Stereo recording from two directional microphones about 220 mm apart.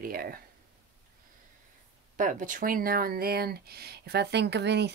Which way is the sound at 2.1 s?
35° right (ahead or behind).